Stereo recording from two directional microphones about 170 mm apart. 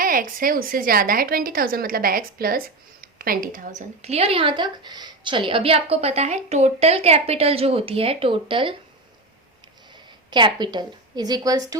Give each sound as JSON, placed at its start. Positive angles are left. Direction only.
{"t": 0.0, "sound": "a woman's voice", "side_deg": -55}
{"t": 10.2, "sound": "a woman's voice", "side_deg": -25}